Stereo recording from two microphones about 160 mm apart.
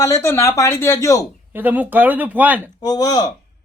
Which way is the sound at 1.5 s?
10° right (ahead or behind).